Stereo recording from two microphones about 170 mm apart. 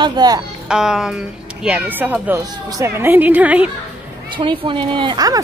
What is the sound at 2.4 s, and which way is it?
A woman's voice, 20° right (ahead or behind).